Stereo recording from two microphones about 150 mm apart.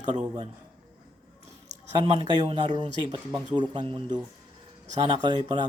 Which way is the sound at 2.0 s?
40° right (ahead or behind).